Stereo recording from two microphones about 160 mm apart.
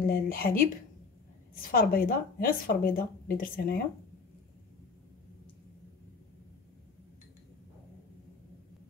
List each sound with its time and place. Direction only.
0.0 s speech: 70° left (ahead or behind)